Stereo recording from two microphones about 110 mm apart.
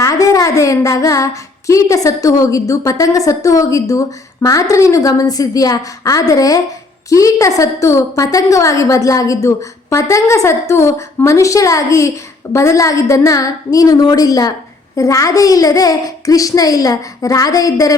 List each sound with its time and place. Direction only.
0.0 s a woman's voice: 30° left (ahead or behind)